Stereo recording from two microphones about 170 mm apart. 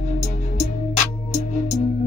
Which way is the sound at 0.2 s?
45° left (ahead or behind).